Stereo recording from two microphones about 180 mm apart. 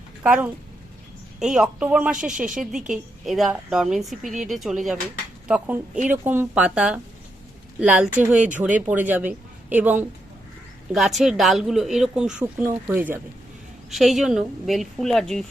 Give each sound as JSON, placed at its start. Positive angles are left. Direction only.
{"t": 0.2, "sound": "a woman's voice", "side_deg": -10}